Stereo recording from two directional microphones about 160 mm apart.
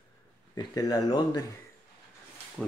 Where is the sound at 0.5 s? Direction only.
25° left (ahead or behind).